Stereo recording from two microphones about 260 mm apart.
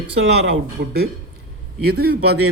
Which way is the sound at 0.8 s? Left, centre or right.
Right.